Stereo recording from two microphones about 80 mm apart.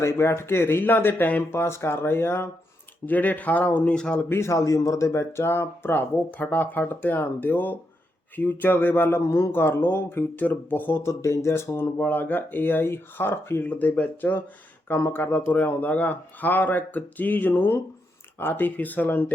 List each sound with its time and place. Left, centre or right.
0.0 s speech: left; by 4.3 s centre
4.3 s speech: left